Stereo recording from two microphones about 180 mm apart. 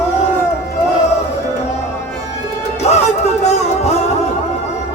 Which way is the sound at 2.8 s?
40° left (ahead or behind).